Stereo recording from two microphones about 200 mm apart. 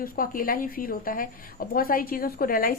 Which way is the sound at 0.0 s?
45° left (ahead or behind).